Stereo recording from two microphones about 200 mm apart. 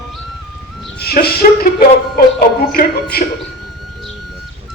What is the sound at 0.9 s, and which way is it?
A man's voice, 50° left (ahead or behind).